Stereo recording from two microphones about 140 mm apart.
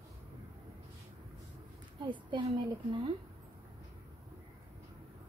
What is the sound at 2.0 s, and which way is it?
A woman's voice, 35° right (ahead or behind).